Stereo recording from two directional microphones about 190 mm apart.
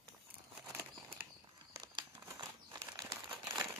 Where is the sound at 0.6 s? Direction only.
15° right (ahead or behind).